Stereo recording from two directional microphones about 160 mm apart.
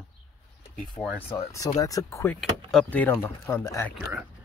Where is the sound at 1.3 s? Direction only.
20° left (ahead or behind).